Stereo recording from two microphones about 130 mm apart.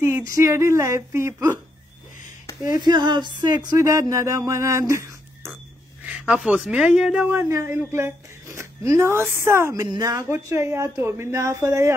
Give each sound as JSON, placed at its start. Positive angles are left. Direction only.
{"t": 0.3, "sound": "speech", "side_deg": -20}
{"t": 2.6, "sound": "speech", "side_deg": -30}
{"t": 3.7, "sound": "speech", "side_deg": -25}
{"t": 6.0, "sound": "speech", "side_deg": -10}
{"t": 7.3, "sound": "speech", "side_deg": -20}